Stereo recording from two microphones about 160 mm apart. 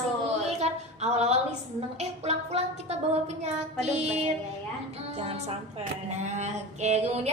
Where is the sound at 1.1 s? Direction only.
40° right (ahead or behind).